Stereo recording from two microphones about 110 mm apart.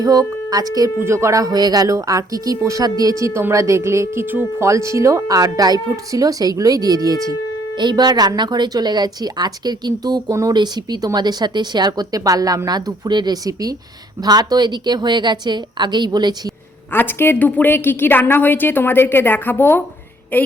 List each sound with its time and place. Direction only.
0.0 s speech: 35° right (ahead or behind)
0.9 s speech: 25° right (ahead or behind)
16.9 s a woman's voice: 20° left (ahead or behind)